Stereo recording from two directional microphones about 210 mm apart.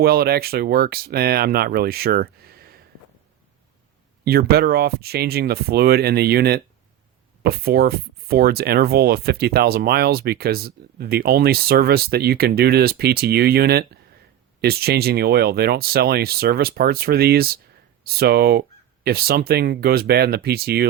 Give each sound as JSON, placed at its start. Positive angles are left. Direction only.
{"t": 0.0, "sound": "speech", "side_deg": -45}
{"t": 4.3, "sound": "speech", "side_deg": -50}